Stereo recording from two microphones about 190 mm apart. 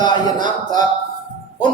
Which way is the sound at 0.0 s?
20° left (ahead or behind).